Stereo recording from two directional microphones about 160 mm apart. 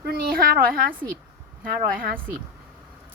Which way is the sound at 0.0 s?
70° right (ahead or behind).